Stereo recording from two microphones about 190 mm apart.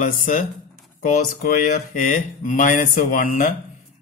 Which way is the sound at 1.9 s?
40° left (ahead or behind).